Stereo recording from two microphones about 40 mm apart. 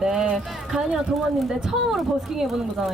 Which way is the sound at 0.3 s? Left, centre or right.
Centre.